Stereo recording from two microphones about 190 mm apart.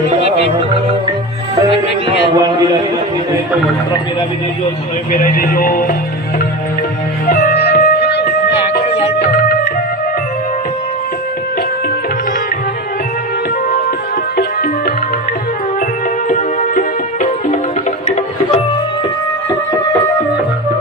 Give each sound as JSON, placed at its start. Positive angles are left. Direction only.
{"t": 5.2, "sound": "speech", "side_deg": 45}
{"t": 7.3, "sound": "music", "side_deg": 55}
{"t": 8.9, "sound": "music", "side_deg": 35}
{"t": 14.3, "sound": "music", "side_deg": 50}
{"t": 16.3, "sound": "music", "side_deg": 40}